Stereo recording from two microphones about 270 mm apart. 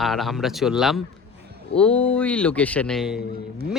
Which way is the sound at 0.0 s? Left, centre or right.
Centre.